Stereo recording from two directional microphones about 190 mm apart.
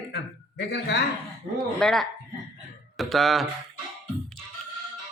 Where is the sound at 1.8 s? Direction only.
Centre (ahead or behind).